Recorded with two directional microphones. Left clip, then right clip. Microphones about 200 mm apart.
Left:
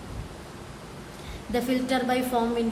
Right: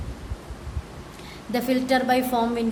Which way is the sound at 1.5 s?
30° right (ahead or behind).